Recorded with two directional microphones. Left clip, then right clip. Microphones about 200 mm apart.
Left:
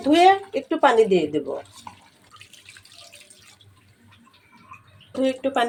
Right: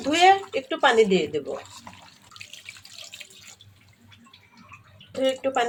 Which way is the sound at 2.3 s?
20° right (ahead or behind).